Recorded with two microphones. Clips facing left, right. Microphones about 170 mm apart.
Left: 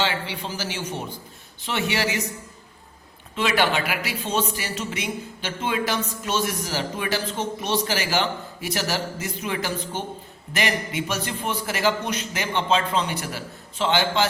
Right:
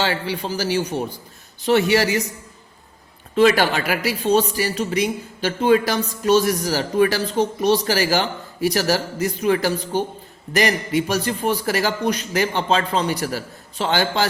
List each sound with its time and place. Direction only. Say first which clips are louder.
0.0 s speech: right 4 dB; 40° right (ahead or behind)
3.3 s speech: right 6 dB; 40° right (ahead or behind)